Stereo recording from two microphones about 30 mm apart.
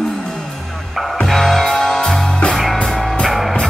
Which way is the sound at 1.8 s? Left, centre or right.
Left.